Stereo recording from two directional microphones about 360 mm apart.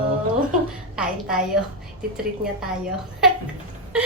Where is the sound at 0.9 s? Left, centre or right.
Centre.